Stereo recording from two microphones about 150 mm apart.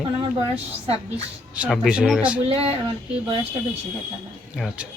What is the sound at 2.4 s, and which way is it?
Speech, 40° right (ahead or behind).